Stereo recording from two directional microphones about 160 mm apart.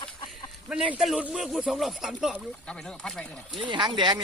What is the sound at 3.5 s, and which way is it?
Speech, 30° right (ahead or behind).